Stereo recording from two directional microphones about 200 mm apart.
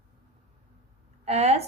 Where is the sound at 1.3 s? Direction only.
30° right (ahead or behind).